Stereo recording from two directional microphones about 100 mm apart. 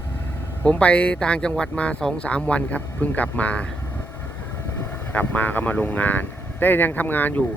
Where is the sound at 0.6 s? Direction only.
15° left (ahead or behind).